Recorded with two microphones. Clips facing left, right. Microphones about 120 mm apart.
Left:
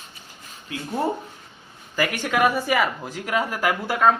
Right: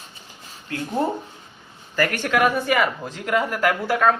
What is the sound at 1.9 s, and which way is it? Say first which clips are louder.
Speech: right 2 dB; 10° left (ahead or behind).